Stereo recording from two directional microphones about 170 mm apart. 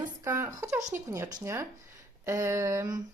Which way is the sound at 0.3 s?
20° right (ahead or behind).